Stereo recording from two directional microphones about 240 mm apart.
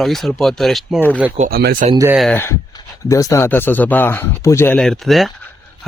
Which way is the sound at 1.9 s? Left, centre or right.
Centre.